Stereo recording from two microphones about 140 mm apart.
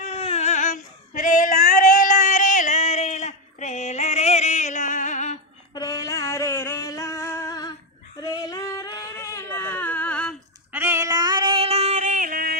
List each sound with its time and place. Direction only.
0.0 s female singing: 45° left (ahead or behind)
5.7 s a sound: 25° left (ahead or behind); by 10.3 s 10° left (ahead or behind)
10.7 s female singing: 15° right (ahead or behind); by 12.5 s 85° right